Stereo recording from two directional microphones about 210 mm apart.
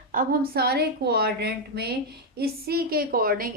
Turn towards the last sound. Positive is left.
turn(degrees=-45)  # may be behind; listen again after turning